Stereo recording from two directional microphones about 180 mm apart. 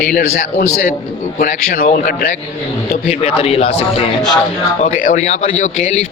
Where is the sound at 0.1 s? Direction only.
55° left (ahead or behind).